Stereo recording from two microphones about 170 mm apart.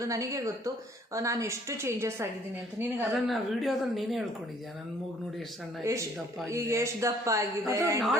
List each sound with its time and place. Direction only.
0.0 s a woman's voice: 20° right (ahead or behind)
3.0 s a woman's voice: centre (ahead or behind)
5.8 s a woman's voice: 15° right (ahead or behind)